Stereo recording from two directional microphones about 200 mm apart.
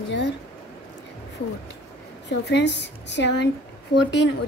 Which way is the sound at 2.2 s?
60° left (ahead or behind).